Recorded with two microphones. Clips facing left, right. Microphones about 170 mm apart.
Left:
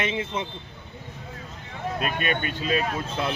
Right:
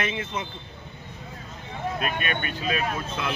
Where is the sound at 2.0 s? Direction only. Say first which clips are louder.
Left 2 dB; 30° left (ahead or behind).